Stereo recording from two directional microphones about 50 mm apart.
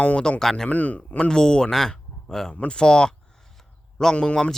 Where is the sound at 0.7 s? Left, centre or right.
Left; by 3.2 s centre.